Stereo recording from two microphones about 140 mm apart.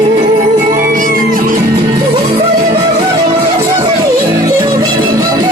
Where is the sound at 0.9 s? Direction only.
70° right (ahead or behind).